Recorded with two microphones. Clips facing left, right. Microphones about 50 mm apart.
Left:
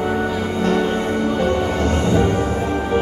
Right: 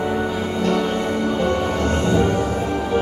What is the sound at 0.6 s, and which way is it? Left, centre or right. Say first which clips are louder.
Music: left 2 dB; left.